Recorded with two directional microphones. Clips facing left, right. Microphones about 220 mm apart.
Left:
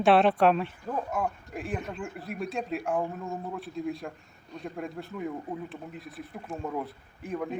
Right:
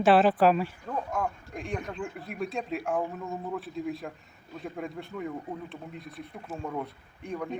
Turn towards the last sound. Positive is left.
turn(degrees=5)  # may be behind; listen again after turning